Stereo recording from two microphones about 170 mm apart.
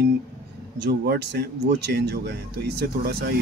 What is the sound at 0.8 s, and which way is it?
Speech, 80° right.